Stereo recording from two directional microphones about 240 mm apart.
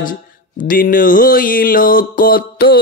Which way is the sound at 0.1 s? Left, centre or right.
Left.